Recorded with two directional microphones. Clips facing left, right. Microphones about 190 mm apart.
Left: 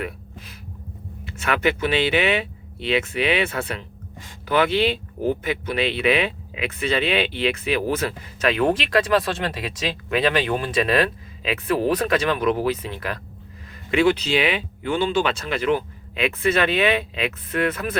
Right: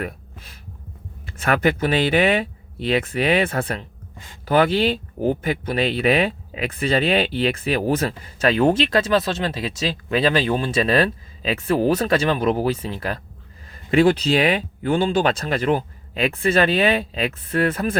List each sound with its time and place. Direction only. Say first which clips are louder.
1.2 s speech: right 3 dB; 35° right (ahead or behind)